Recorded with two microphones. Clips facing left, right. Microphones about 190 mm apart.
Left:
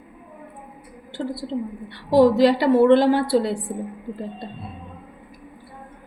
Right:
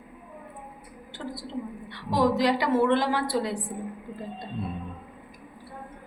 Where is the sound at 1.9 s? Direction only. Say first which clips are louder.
Left 9 dB; 30° left (ahead or behind).